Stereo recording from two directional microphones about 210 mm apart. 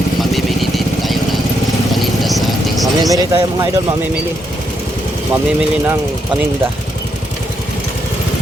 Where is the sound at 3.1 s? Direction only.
15° right (ahead or behind).